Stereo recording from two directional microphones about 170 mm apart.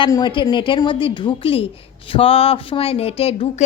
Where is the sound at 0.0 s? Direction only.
25° left (ahead or behind).